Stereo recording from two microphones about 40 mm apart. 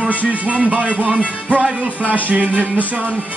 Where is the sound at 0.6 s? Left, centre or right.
Right.